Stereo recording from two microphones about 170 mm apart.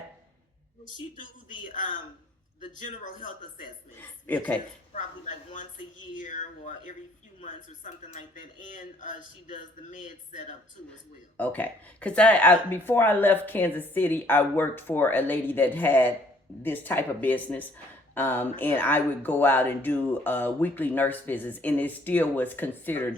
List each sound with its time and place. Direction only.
3.9 s speech: 10° left (ahead or behind)
4.9 s speech: 45° left (ahead or behind)
11.3 s speech: 10° left (ahead or behind)